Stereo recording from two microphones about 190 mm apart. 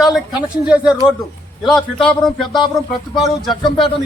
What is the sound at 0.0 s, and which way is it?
A man's voice, 5° right (ahead or behind).